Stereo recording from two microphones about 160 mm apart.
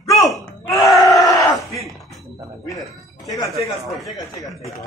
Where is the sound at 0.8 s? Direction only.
20° left (ahead or behind).